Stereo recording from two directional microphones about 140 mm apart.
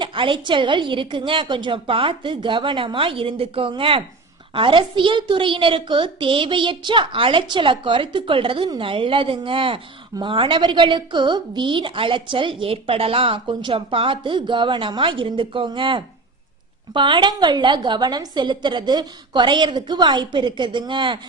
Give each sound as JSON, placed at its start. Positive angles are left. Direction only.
{"t": 0.0, "sound": "a woman's voice", "side_deg": -35}